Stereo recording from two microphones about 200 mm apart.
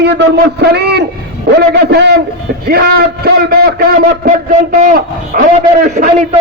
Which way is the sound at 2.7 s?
50° right (ahead or behind).